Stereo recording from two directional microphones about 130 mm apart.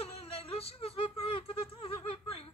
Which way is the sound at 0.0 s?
50° left (ahead or behind).